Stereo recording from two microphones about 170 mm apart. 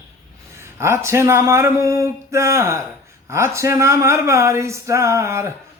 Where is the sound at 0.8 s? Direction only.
15° right (ahead or behind).